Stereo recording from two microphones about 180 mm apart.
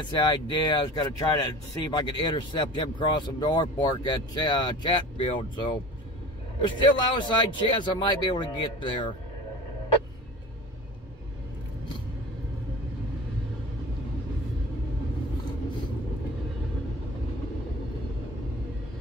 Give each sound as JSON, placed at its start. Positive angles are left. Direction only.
{"t": 0.0, "sound": "speech", "side_deg": 25}